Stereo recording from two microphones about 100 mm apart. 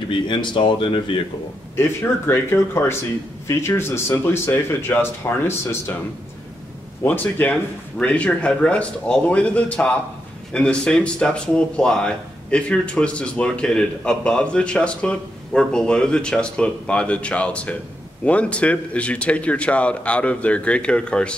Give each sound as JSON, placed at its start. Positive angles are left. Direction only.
{"t": 0.3, "sound": "speech", "side_deg": 55}
{"t": 1.8, "sound": "speech", "side_deg": 25}
{"t": 7.1, "sound": "speech", "side_deg": 15}